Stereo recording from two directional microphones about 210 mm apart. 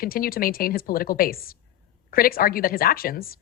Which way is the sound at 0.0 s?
45° left (ahead or behind).